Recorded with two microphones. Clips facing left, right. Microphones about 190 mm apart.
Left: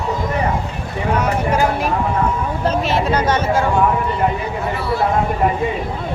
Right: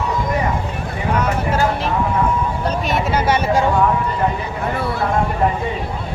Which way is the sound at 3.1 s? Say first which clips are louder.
Even; 10° right (ahead or behind).